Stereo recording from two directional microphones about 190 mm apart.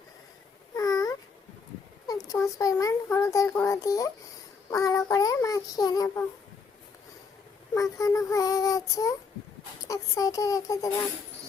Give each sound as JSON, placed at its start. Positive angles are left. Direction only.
{"t": 0.8, "sound": "babbling", "side_deg": 20}
{"t": 2.0, "sound": "a child's voice", "side_deg": 15}
{"t": 7.7, "sound": "a child's voice", "side_deg": 15}